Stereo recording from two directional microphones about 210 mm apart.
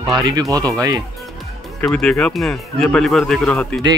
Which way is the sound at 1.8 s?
5° left (ahead or behind).